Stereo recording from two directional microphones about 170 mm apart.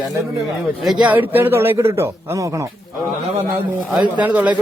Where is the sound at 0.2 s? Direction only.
Centre (ahead or behind); by 2.6 s 20° right (ahead or behind).